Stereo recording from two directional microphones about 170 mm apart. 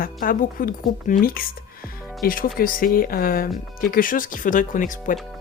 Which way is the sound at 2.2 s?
55° left (ahead or behind).